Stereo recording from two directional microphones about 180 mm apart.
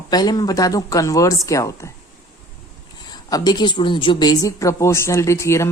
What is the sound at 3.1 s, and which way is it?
A woman's voice, 20° left (ahead or behind).